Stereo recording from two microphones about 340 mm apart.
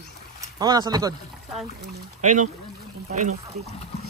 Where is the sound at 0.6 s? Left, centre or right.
Centre.